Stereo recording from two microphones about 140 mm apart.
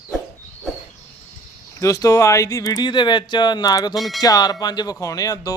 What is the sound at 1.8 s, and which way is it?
Speech, 25° left (ahead or behind).